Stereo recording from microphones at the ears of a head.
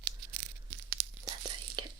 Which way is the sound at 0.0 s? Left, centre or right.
Right.